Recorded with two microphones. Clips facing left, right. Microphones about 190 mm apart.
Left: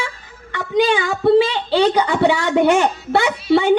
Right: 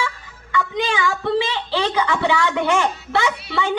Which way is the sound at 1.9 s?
40° left (ahead or behind).